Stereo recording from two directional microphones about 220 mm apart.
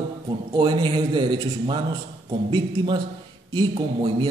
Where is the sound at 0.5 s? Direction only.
20° right (ahead or behind).